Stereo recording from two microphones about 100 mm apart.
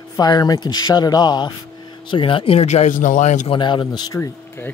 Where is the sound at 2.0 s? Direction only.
55° left (ahead or behind); by 2.8 s 80° left.